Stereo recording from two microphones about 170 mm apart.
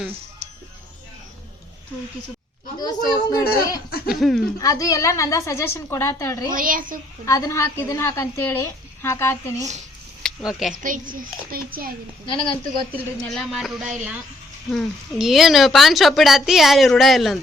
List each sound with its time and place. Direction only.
2.7 s a woman's voice: 25° left (ahead or behind)
3.8 s speech: 65° left (ahead or behind)
4.1 s speech: centre (ahead or behind)
4.6 s a woman's voice: 20° left (ahead or behind)
6.5 s a woman's voice: 55° right (ahead or behind)
7.3 s a woman's voice: 20° left (ahead or behind)
10.2 s speech: centre (ahead or behind)
11.1 s speech: 60° right (ahead or behind)
12.2 s a woman's voice: 30° left (ahead or behind)
12.9 s speech: centre (ahead or behind)